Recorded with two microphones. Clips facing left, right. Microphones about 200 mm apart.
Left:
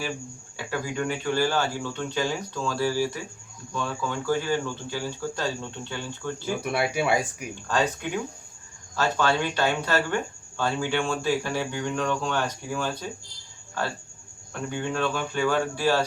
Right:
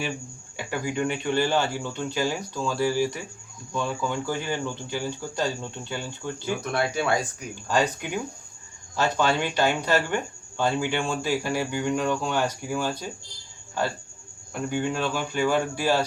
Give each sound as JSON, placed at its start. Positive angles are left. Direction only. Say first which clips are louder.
{"t": 0.5, "sound": "speech", "louder": "right 2 dB", "side_deg": -15}
{"t": 4.1, "sound": "speech", "louder": "left 3 dB", "side_deg": -15}
{"t": 6.4, "sound": "speech", "louder": "even", "side_deg": 10}
{"t": 7.7, "sound": "speech", "louder": "right 1 dB", "side_deg": -10}
{"t": 14.5, "sound": "speech", "louder": "right 2 dB", "side_deg": -10}